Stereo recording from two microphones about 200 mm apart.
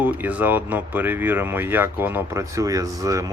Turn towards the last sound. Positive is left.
turn(degrees=-15)  # may be behind; listen again after turning